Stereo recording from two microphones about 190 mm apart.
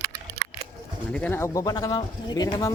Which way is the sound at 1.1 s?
10° left (ahead or behind).